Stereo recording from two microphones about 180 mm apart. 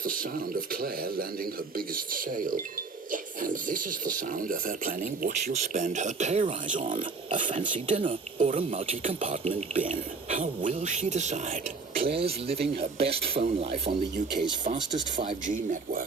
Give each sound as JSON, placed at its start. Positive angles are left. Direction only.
{"t": 0.0, "sound": "speech", "side_deg": -50}
{"t": 9.8, "sound": "speech", "side_deg": -45}
{"t": 14.6, "sound": "speech", "side_deg": -45}